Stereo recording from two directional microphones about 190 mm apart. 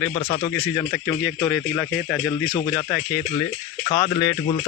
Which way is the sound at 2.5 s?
15° left (ahead or behind).